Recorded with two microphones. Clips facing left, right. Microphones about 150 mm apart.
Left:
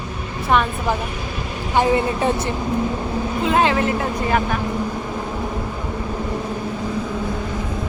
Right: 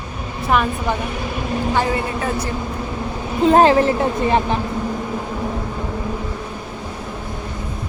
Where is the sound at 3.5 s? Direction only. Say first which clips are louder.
Right 6 dB; 35° right (ahead or behind).